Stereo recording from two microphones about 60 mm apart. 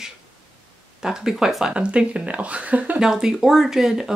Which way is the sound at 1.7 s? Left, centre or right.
Centre.